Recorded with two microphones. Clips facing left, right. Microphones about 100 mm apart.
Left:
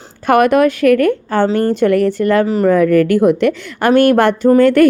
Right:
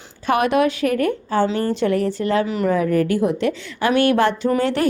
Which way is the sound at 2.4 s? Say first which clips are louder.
Left 7 dB; 40° left (ahead or behind).